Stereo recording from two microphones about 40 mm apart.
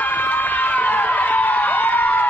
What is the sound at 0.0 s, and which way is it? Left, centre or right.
Crowd, left.